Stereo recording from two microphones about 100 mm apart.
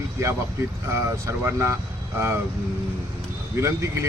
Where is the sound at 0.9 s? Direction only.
25° right (ahead or behind).